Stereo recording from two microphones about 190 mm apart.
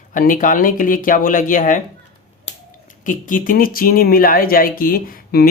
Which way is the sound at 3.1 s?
45° left (ahead or behind).